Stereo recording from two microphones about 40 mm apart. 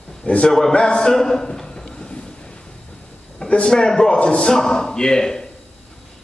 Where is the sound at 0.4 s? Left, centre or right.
Centre.